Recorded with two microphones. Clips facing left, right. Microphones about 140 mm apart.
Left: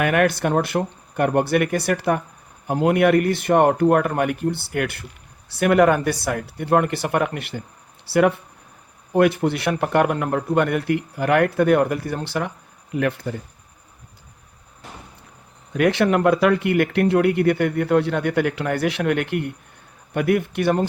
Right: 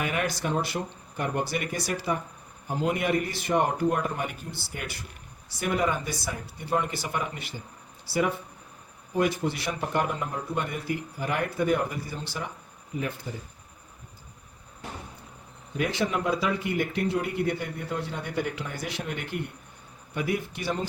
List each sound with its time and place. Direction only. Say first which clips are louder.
0.0 s speech: left 10 dB; 60° left (ahead or behind)
15.7 s speech: left 10 dB; 70° left (ahead or behind)